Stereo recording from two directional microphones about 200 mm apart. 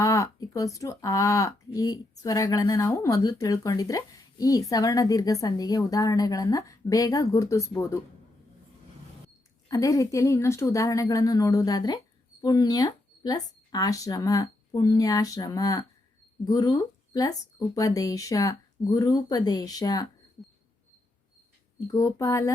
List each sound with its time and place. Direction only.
0.0 s speech: 15° left (ahead or behind)
9.6 s speech: 15° left (ahead or behind)
21.9 s speech: 15° left (ahead or behind)